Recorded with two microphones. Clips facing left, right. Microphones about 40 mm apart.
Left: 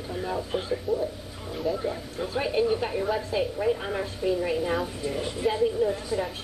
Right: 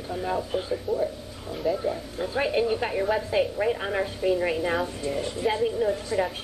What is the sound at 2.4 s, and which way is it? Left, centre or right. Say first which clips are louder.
A woman's voice: even; centre.